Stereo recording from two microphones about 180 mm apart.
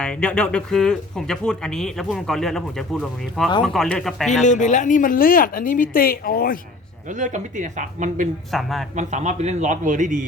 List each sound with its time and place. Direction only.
0.0 s speech: 5° left (ahead or behind)
4.3 s a woman's voice: 40° left (ahead or behind)
7.1 s a man's voice: 45° right (ahead or behind)
8.4 s speech: centre (ahead or behind)
9.0 s a man's voice: 40° right (ahead or behind)